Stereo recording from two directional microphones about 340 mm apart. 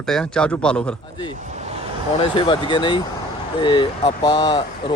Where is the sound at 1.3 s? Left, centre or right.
Right.